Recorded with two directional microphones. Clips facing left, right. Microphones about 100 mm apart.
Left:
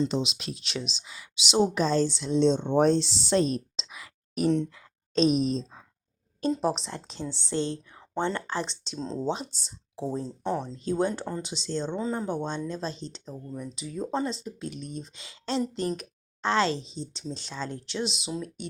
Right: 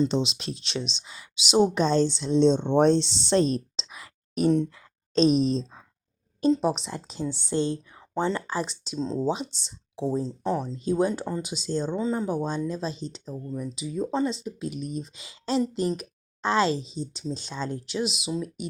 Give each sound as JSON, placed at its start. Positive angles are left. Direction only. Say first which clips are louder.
{"t": 0.1, "sound": "speech", "louder": "right 3 dB", "side_deg": -30}
{"t": 6.5, "sound": "speech", "louder": "right 3 dB", "side_deg": 0}
{"t": 16.0, "sound": "a sound", "louder": "right 2 dB", "side_deg": -15}
{"t": 16.9, "sound": "speech", "louder": "right 4 dB", "side_deg": -15}